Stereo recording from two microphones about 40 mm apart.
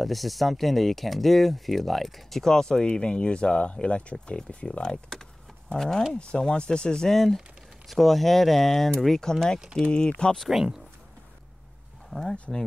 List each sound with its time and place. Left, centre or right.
0.0 s speech: centre
2.4 s speech: centre
7.1 s speech: centre; by 10.3 s left
10.5 s speech: centre
12.1 s speech: centre